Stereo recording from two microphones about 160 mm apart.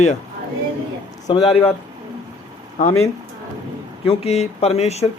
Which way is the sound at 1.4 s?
40° left (ahead or behind).